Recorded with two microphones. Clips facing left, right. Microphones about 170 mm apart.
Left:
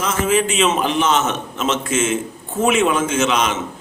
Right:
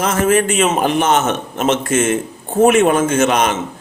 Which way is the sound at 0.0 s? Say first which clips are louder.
Right 4 dB; 55° right (ahead or behind).